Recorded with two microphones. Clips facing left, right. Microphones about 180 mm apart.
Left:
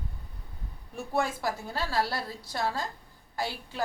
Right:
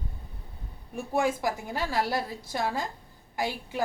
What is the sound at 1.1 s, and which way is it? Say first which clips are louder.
A woman's voice: right 3 dB; 15° right (ahead or behind).